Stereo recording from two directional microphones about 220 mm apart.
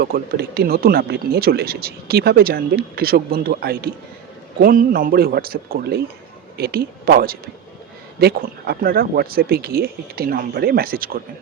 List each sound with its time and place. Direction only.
0.0 s speech: 45° right (ahead or behind)